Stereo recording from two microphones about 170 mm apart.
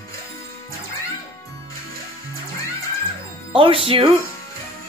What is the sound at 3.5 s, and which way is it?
Speech, 30° right (ahead or behind).